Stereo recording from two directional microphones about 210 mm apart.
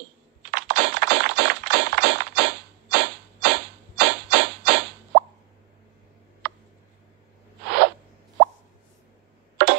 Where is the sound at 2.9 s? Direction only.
55° right (ahead or behind).